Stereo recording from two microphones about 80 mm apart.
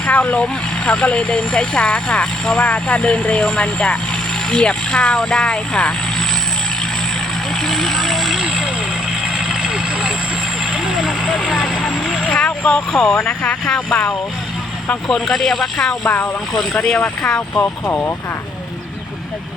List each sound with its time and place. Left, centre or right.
0.0 s speech: centre
7.5 s vehicle: centre
12.3 s vehicle: centre
13.1 s speech: left
15.0 s speech: centre
16.0 s speech: left
16.7 s speech: centre